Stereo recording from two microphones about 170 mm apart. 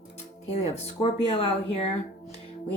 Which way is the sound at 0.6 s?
35° left (ahead or behind).